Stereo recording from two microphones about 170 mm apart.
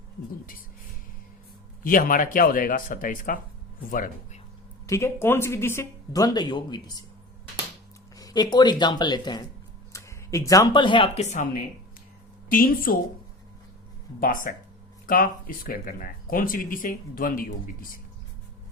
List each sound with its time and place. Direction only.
1.8 s speech: 55° left (ahead or behind)
4.9 s speech: 15° left (ahead or behind)
8.1 s speech: 20° left (ahead or behind); by 11.4 s 40° left (ahead or behind)
12.5 s speech: 55° left (ahead or behind)
14.2 s speech: 55° left (ahead or behind)